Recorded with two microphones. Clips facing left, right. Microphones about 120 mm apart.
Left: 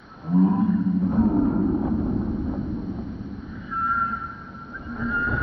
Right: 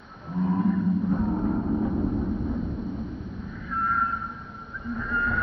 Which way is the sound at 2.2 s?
Centre (ahead or behind).